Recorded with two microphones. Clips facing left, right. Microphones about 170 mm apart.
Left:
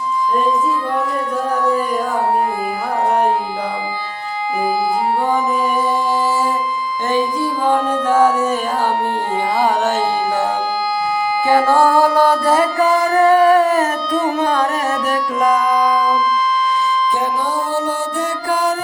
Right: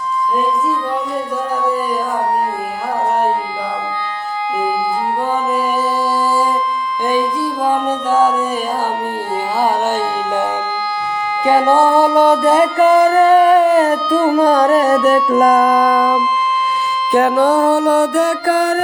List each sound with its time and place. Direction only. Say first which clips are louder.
11.4 s music: right 2 dB; 20° right (ahead or behind); by 16.0 s 50° right (ahead or behind)
17.1 s music: right 7 dB; 70° right (ahead or behind)